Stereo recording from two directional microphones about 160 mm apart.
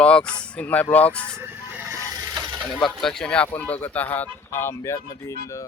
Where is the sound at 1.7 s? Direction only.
15° right (ahead or behind).